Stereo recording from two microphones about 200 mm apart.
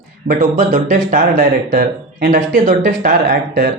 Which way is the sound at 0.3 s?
40° right (ahead or behind).